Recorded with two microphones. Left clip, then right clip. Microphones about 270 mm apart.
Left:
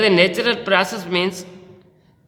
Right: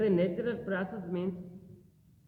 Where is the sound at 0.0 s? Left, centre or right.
Left.